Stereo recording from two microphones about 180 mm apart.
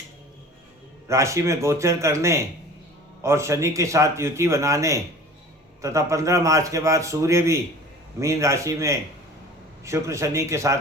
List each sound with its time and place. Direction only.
1.0 s a man's voice: 15° right (ahead or behind)